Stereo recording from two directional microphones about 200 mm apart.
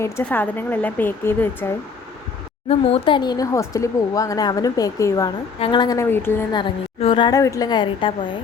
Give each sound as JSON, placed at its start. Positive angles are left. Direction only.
{"t": 0.0, "sound": "speech", "side_deg": 10}
{"t": 2.6, "sound": "a woman's voice", "side_deg": 30}
{"t": 6.6, "sound": "a woman's voice", "side_deg": 25}